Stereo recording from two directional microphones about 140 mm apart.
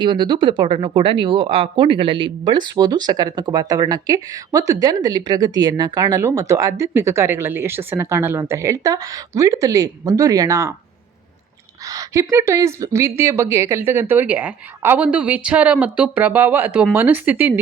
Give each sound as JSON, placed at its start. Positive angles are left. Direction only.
{"t": 0.0, "sound": "speech", "side_deg": -35}
{"t": 11.9, "sound": "speech", "side_deg": -25}